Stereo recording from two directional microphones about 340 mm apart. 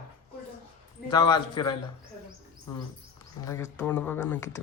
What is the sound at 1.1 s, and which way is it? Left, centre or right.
Speech, centre.